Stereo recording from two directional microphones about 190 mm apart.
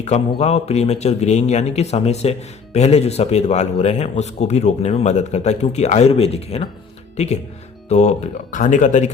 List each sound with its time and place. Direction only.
0.0 s a man's voice: 35° left (ahead or behind)